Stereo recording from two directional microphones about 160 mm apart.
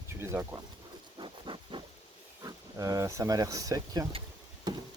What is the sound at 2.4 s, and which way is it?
Speech, 20° right (ahead or behind).